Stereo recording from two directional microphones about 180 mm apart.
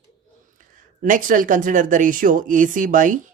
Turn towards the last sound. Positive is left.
turn(degrees=-45)  # may be behind; listen again after turning